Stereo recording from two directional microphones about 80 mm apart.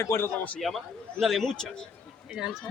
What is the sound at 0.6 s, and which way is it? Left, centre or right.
Speech, centre.